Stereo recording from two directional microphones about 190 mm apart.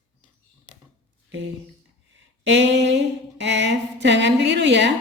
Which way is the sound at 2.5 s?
65° right (ahead or behind).